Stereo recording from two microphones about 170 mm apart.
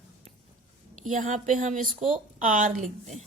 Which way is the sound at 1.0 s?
50° right (ahead or behind).